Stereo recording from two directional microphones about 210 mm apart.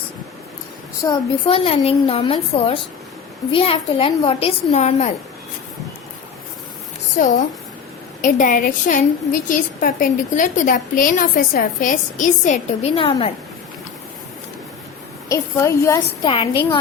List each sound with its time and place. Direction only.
1.0 s a woman's voice: 20° left (ahead or behind)
7.2 s a woman's voice: 35° left (ahead or behind)
15.3 s a woman's voice: 15° left (ahead or behind)